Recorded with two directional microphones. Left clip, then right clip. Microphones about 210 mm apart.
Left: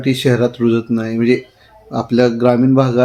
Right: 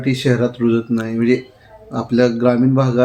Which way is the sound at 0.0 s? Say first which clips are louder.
Left 3 dB; 35° left (ahead or behind).